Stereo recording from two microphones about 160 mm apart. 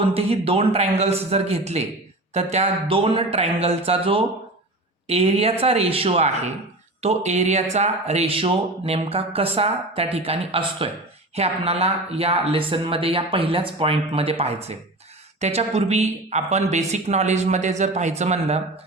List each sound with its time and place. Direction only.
0.1 s speech: 40° right (ahead or behind)